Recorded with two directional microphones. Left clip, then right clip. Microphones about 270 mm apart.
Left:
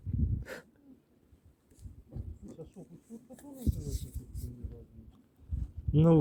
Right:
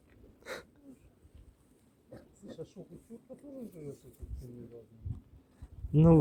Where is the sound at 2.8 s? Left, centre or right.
Right.